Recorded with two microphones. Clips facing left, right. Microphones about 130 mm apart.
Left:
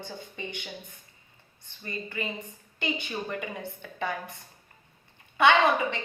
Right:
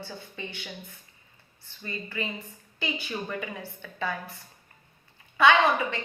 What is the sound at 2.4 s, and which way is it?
A woman's voice, 20° left (ahead or behind).